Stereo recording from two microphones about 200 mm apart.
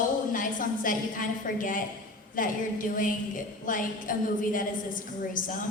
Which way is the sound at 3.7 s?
40° left (ahead or behind).